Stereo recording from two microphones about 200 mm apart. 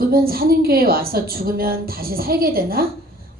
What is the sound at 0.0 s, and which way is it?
Speech, 50° right (ahead or behind).